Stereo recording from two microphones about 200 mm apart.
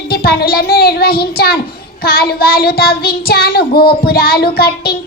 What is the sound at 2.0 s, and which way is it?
Child singing, 50° left (ahead or behind).